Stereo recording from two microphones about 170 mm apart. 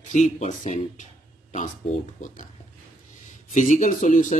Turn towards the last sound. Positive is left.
turn(degrees=45)  # may be behind; listen again after turning